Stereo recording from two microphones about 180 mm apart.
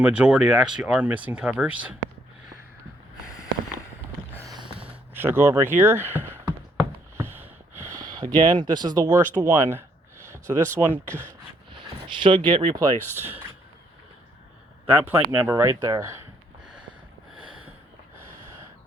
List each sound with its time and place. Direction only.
0.0 s speech: 5° right (ahead or behind)
4.5 s a sound: 30° right (ahead or behind)
4.9 s speech: 10° right (ahead or behind)
7.2 s a sound: 10° right (ahead or behind)
7.8 s speech: 15° right (ahead or behind)
11.7 s a sound: 30° right (ahead or behind)
12.5 s speech: 25° right (ahead or behind)
13.1 s speech: 10° right (ahead or behind)
14.8 s speech: 10° right (ahead or behind)